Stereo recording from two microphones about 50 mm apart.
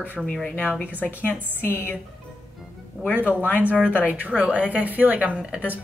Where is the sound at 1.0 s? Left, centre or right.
Left.